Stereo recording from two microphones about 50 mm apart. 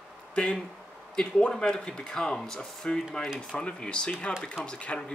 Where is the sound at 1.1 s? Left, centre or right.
Centre.